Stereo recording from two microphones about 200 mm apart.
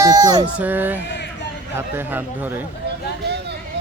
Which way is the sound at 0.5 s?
10° right (ahead or behind).